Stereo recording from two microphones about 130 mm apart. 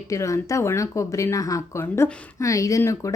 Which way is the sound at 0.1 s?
25° left (ahead or behind).